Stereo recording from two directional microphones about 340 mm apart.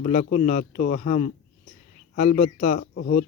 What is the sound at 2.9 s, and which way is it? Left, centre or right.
Speech, left.